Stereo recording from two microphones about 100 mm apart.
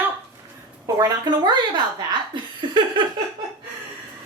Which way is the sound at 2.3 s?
55° right (ahead or behind).